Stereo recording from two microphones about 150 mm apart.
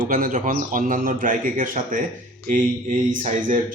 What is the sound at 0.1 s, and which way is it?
A man's voice, 65° right (ahead or behind).